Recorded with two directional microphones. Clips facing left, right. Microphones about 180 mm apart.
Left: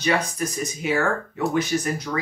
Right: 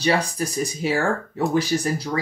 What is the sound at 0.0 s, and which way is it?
Speech, 35° right (ahead or behind).